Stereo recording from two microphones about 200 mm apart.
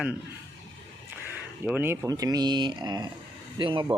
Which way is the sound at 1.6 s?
10° right (ahead or behind).